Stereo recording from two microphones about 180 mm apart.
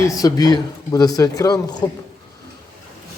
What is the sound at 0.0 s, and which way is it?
Speech, 20° left (ahead or behind).